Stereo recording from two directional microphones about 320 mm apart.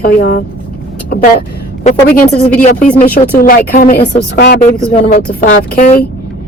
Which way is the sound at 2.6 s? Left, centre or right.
Left.